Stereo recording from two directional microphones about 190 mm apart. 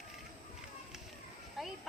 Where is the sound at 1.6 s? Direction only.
Centre (ahead or behind).